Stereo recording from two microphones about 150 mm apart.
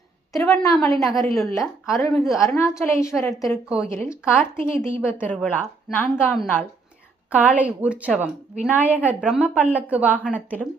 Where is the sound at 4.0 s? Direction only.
15° left (ahead or behind).